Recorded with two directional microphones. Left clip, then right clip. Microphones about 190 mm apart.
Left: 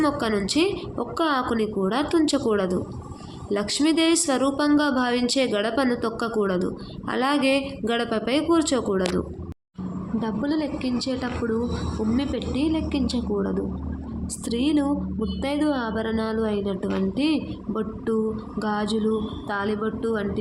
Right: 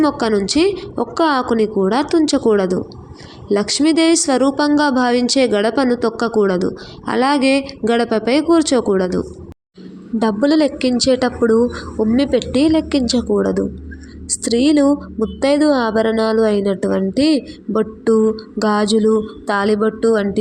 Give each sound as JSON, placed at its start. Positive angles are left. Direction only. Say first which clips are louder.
{"t": 0.0, "sound": "a woman's voice", "louder": "right 7 dB", "side_deg": -30}
{"t": 10.2, "sound": "speech", "louder": "right 12 dB", "side_deg": -40}